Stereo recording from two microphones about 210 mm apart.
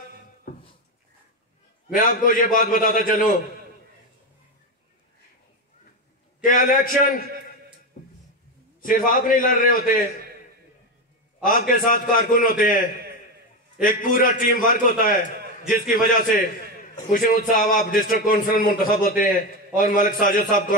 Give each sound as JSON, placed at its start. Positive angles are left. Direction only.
{"t": 1.9, "sound": "a man's voice", "side_deg": 40}
{"t": 6.4, "sound": "a man's voice", "side_deg": 40}
{"t": 8.8, "sound": "a man's voice", "side_deg": 40}
{"t": 11.4, "sound": "a man's voice", "side_deg": 40}